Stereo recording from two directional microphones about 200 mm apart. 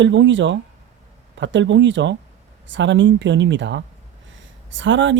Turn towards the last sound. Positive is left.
turn(degrees=-70)  # may be behind; listen again after turning